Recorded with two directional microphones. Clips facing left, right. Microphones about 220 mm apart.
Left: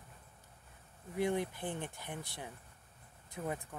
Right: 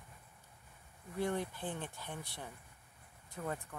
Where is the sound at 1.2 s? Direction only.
15° left (ahead or behind).